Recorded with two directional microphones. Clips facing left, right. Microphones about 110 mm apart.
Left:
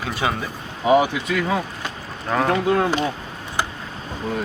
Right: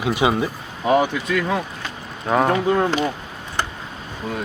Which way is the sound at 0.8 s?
10° left (ahead or behind).